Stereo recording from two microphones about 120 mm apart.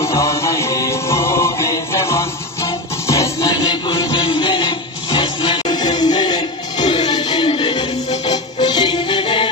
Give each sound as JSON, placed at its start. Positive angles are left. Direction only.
{"t": 0.0, "sound": "music", "side_deg": 25}
{"t": 4.1, "sound": "music", "side_deg": 45}
{"t": 7.1, "sound": "a sound", "side_deg": 35}
{"t": 7.4, "sound": "music", "side_deg": 50}
{"t": 8.3, "sound": "music", "side_deg": 35}